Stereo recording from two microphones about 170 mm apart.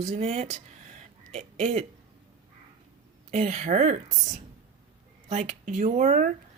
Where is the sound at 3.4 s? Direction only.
40° right (ahead or behind).